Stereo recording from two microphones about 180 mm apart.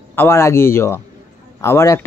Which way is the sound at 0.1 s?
15° left (ahead or behind).